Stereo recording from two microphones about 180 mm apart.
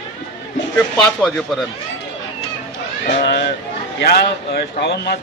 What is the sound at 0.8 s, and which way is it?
Speech, 5° left (ahead or behind).